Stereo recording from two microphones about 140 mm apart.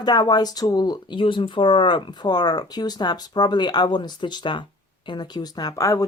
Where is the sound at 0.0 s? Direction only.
30° left (ahead or behind).